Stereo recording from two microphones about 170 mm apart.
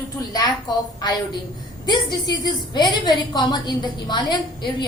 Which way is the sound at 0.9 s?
25° left (ahead or behind).